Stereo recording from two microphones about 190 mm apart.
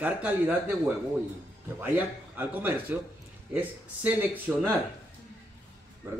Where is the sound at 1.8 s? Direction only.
10° right (ahead or behind).